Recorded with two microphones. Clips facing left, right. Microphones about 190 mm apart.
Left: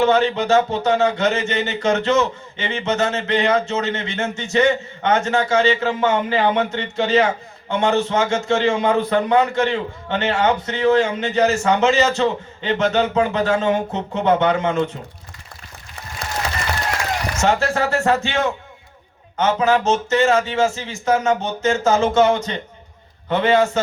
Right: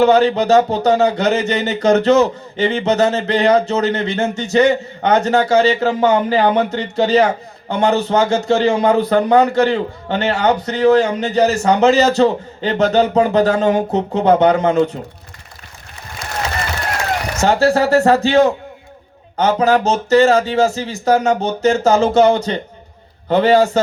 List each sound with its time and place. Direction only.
0.0 s speech: 40° right (ahead or behind)
17.4 s speech: 35° right (ahead or behind)